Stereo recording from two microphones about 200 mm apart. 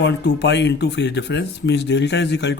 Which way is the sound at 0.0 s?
60° left (ahead or behind).